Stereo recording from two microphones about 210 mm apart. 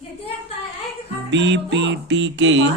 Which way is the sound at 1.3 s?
60° right (ahead or behind).